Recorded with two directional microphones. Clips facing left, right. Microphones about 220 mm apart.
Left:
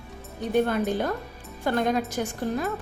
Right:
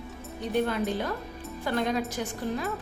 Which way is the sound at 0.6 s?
50° left (ahead or behind).